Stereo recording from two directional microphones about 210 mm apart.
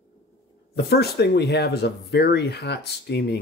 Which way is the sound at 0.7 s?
50° left (ahead or behind).